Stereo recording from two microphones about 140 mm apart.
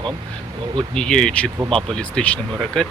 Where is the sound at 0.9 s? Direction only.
5° left (ahead or behind).